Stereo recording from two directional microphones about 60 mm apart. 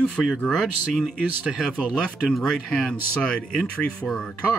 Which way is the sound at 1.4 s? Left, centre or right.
Centre.